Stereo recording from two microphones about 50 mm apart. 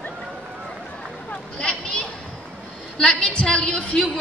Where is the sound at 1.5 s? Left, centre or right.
Left.